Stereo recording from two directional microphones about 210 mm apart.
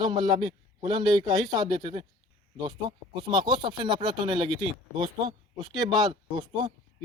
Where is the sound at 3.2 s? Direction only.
20° right (ahead or behind).